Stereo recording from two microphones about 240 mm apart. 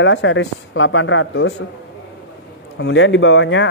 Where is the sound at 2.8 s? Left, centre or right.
Left.